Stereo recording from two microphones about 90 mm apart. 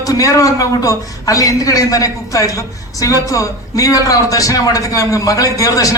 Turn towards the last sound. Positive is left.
turn(degrees=40)  # may be behind; listen again after turning